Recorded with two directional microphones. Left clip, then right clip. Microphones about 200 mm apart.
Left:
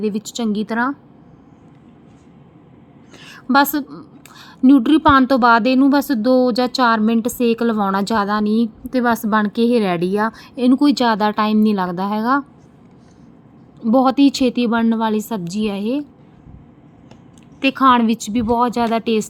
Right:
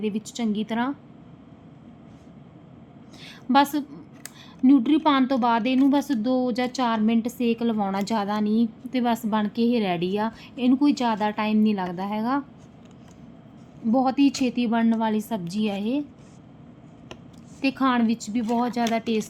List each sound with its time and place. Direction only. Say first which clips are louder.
0.0 s a woman's voice: left 7 dB; 25° left (ahead or behind)
3.2 s a woman's voice: left 5 dB; 25° left (ahead or behind)
13.8 s a woman's voice: left 7 dB; 30° left (ahead or behind)
17.6 s a woman's voice: left 10 dB; 20° left (ahead or behind)